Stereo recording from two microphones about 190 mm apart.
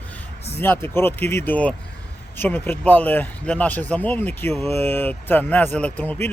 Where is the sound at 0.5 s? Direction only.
10° left (ahead or behind).